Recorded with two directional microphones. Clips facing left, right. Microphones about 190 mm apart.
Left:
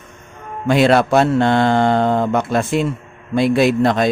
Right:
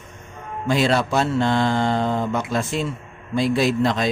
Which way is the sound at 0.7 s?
65° left (ahead or behind).